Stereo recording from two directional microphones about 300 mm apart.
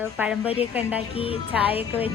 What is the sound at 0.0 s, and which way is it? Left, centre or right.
A woman's voice, centre.